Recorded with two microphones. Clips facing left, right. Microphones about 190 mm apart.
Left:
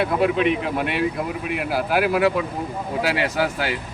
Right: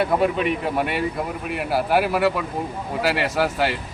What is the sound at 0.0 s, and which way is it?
Speech, centre (ahead or behind).